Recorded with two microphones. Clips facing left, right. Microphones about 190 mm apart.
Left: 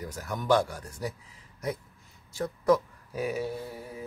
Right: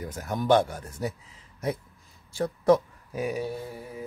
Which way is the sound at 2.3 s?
30° right (ahead or behind).